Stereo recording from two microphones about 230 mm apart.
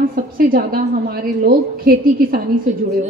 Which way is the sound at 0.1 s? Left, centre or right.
Right.